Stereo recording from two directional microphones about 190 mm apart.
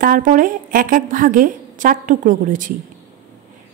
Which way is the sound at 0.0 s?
45° right (ahead or behind).